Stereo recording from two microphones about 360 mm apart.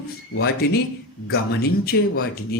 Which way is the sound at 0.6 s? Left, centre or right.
Left.